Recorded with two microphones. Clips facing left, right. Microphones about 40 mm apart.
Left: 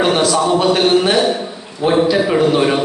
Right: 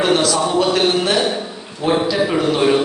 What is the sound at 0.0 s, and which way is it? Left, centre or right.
A man's voice, centre.